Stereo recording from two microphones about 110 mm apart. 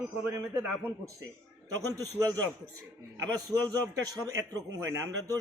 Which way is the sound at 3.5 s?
35° right (ahead or behind).